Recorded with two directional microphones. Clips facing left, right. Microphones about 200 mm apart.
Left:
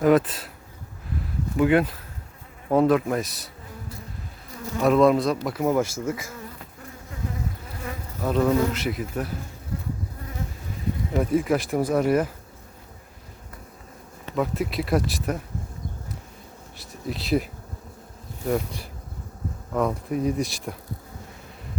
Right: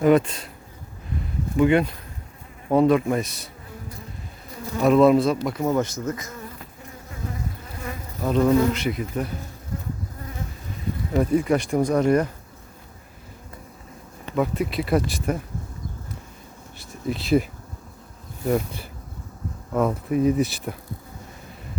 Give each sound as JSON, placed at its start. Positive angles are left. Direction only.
{"t": 0.0, "sound": "speech", "side_deg": 0}
{"t": 1.5, "sound": "speech", "side_deg": 5}
{"t": 4.8, "sound": "speech", "side_deg": 0}
{"t": 8.2, "sound": "speech", "side_deg": 0}
{"t": 11.1, "sound": "speech", "side_deg": 0}
{"t": 14.3, "sound": "speech", "side_deg": 0}
{"t": 16.7, "sound": "speech", "side_deg": 0}